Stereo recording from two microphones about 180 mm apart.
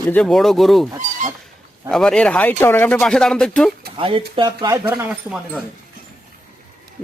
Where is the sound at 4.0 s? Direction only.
30° right (ahead or behind).